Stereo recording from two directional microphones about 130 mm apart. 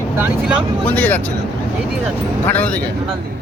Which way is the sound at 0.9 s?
10° left (ahead or behind).